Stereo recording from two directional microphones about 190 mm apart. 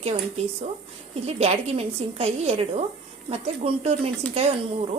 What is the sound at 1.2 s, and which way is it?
A woman's voice, 35° right (ahead or behind).